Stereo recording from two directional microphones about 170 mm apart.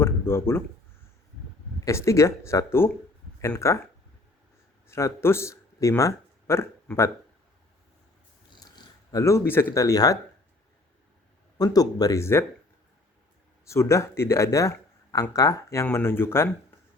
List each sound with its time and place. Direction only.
0.0 s a sound: 15° left (ahead or behind)
1.8 s speech: 15° left (ahead or behind)
4.9 s speech: 15° left (ahead or behind)
8.4 s speech: 25° left (ahead or behind)
11.5 s speech: 20° left (ahead or behind)
13.7 s speech: 15° left (ahead or behind)